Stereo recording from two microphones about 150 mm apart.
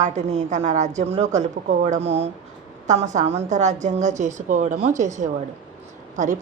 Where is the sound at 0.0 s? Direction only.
50° right (ahead or behind).